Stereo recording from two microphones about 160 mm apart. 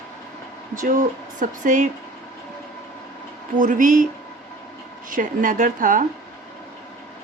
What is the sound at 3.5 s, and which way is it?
Speech, 55° right (ahead or behind).